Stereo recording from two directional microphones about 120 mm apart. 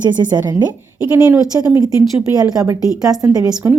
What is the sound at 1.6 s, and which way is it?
Speech, 25° right (ahead or behind).